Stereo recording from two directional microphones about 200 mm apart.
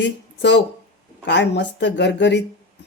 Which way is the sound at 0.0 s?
65° left (ahead or behind).